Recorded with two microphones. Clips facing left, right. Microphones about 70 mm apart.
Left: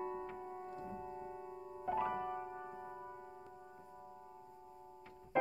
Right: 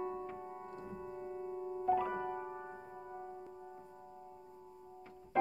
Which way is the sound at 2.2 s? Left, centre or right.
Centre.